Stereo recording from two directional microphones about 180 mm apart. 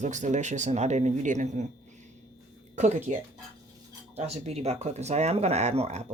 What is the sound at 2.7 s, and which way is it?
Speech, 40° right (ahead or behind).